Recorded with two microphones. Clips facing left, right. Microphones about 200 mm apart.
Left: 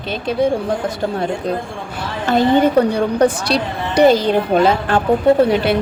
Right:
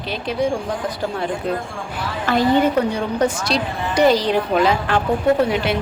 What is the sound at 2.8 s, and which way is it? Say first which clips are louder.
Speech: left 5 dB; 35° left (ahead or behind).